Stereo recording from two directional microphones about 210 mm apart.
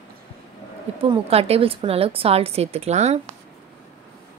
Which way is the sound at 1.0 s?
25° right (ahead or behind).